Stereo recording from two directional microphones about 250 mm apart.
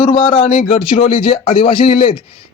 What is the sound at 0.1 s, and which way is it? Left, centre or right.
Speech, left.